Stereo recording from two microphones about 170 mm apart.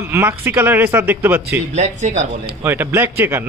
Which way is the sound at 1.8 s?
45° right (ahead or behind).